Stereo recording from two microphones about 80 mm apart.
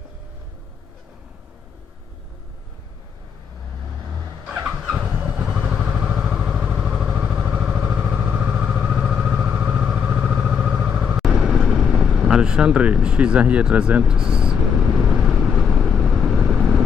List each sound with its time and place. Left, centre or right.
4.6 s vehicle: centre
4.9 s vehicle: centre